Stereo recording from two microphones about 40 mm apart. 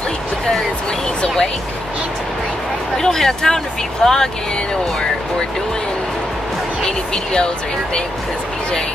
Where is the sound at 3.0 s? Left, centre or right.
Centre.